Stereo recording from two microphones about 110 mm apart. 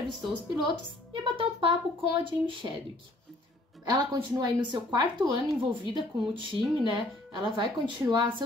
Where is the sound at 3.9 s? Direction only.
40° right (ahead or behind).